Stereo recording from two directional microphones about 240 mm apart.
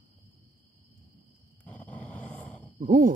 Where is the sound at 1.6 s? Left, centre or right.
Centre.